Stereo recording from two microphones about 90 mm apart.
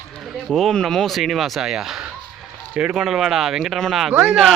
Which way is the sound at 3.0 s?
5° right (ahead or behind).